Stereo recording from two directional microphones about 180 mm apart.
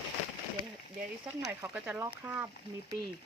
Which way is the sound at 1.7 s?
5° right (ahead or behind).